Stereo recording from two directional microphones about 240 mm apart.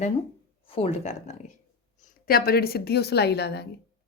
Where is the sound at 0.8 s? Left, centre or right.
Left.